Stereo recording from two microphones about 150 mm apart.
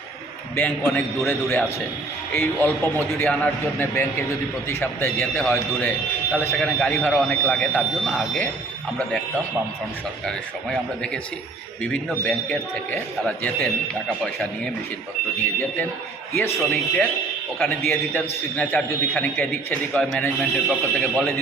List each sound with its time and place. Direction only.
0.5 s a man's voice: 15° left (ahead or behind)
6.3 s a man's voice: 15° left (ahead or behind)
10.2 s a man's voice: 5° left (ahead or behind)
16.3 s a man's voice: 15° left (ahead or behind)